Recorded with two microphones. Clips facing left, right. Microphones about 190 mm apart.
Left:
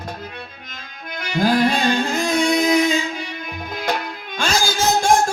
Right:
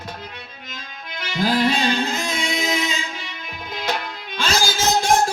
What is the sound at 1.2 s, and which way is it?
Music, 50° left (ahead or behind).